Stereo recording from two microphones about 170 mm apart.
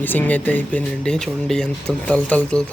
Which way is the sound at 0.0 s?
10° left (ahead or behind).